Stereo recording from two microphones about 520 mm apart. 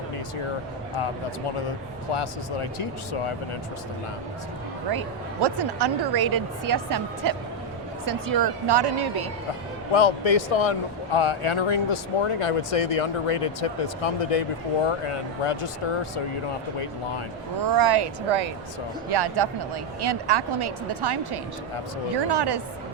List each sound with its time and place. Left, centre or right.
2.1 s speech: left
5.4 s speech: right
9.9 s speech: left
14.8 s speech: left
17.6 s speech: right
19.0 s speech: right